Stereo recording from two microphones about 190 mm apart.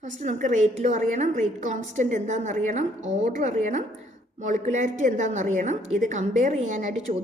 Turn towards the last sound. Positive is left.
turn(degrees=-40)  # may be behind; listen again after turning